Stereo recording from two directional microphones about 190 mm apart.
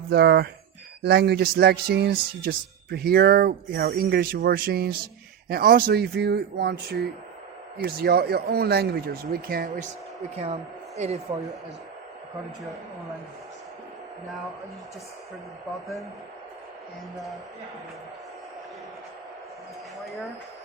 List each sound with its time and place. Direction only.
0.1 s speech: 60° right (ahead or behind)
10.4 s a woman's voice: 35° right (ahead or behind)